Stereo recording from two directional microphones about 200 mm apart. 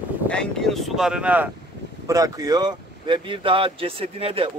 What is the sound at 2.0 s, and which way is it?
Speech, 20° right (ahead or behind).